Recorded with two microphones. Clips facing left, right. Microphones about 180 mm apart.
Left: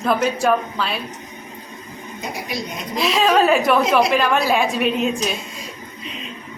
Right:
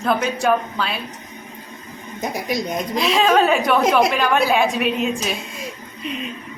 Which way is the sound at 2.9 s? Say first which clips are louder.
Even; centre (ahead or behind).